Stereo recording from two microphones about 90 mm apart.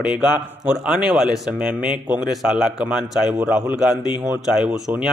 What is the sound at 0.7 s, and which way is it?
Speech, 10° right (ahead or behind).